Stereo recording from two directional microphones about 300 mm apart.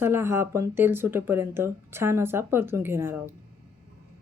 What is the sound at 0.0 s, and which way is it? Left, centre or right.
Speech, centre.